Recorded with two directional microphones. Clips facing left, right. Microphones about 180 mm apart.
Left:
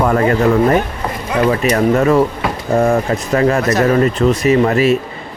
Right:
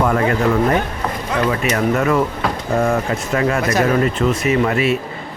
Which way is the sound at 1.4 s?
35° left (ahead or behind).